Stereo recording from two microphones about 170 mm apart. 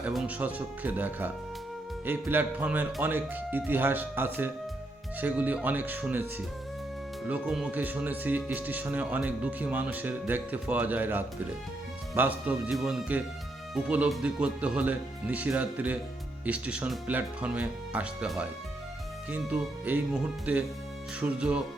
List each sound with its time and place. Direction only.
0.0 s speech: 10° right (ahead or behind)